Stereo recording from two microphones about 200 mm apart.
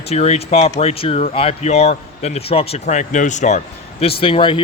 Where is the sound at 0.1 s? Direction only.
30° left (ahead or behind).